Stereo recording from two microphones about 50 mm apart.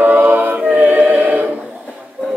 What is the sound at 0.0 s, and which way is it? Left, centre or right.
Music, right.